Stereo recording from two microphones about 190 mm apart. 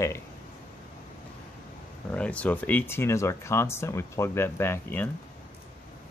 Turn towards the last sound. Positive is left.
turn(degrees=10)  # may be behind; listen again after turning